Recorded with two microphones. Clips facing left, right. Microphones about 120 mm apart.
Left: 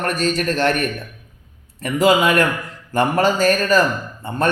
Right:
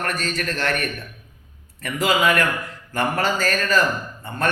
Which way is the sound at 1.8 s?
25° left (ahead or behind).